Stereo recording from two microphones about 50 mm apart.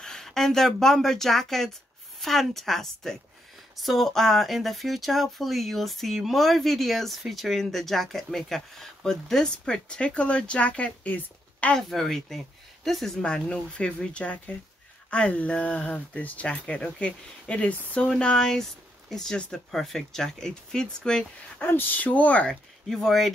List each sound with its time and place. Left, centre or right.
0.0 s speech: centre; by 11.1 s left
11.9 s speech: centre
13.2 s speech: centre
21.5 s speech: left
22.8 s speech: centre